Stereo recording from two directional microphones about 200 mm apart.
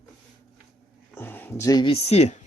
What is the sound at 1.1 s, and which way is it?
Speech, 10° left (ahead or behind).